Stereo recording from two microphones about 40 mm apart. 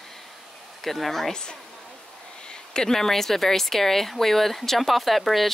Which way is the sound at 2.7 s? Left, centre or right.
Centre.